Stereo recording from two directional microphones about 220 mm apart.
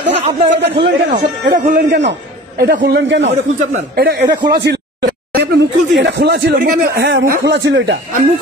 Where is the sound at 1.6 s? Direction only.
45° right (ahead or behind).